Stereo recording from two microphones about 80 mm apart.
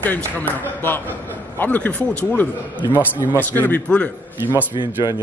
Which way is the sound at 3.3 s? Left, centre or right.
Left.